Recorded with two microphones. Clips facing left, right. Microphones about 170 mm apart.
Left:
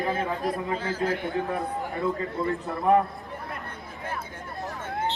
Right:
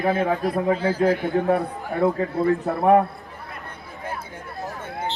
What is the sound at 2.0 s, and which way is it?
A man's voice, 65° right (ahead or behind).